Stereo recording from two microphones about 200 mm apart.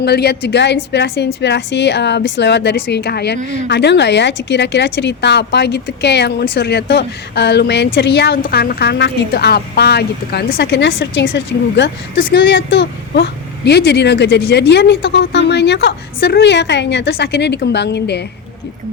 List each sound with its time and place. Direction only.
0.0 s speech: 55° left (ahead or behind)